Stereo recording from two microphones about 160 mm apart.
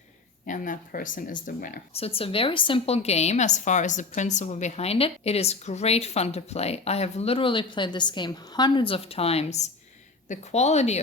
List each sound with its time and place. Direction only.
0.4 s speech: 55° left (ahead or behind)
1.9 s a woman's voice: 40° left (ahead or behind)